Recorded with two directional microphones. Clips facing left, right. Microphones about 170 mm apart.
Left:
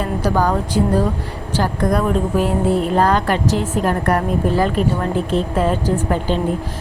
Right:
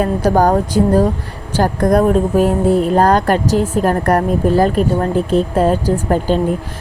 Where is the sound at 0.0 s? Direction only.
45° right (ahead or behind).